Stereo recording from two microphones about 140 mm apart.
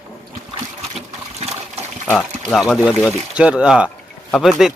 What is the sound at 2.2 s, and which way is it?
Speech, centre (ahead or behind).